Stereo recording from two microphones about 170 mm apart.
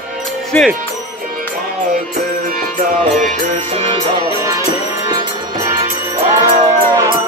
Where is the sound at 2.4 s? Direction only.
55° right (ahead or behind); by 4.3 s 35° right (ahead or behind).